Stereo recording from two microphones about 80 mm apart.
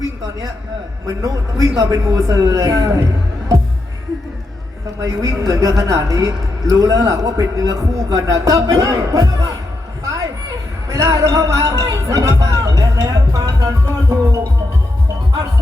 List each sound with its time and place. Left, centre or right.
1.6 s a woman's voice: right
4.9 s a woman's voice: right
10.0 s a sound: right
10.8 s speech: right